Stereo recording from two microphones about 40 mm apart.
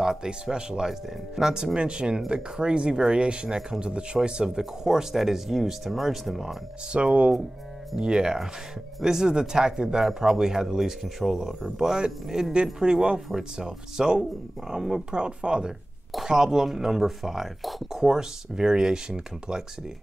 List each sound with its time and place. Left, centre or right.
0.0 s speech: centre
6.9 s speech: right
8.0 s speech: centre
15.0 s speech: right; by 18.0 s centre
18.0 s speech: centre